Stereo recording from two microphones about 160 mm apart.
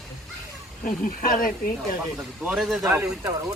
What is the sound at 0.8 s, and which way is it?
Speech, 60° left (ahead or behind).